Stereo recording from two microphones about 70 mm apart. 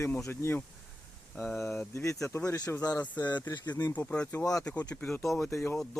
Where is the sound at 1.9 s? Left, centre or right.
Left.